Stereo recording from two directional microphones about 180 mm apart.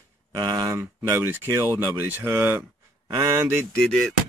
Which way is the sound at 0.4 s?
25° right (ahead or behind).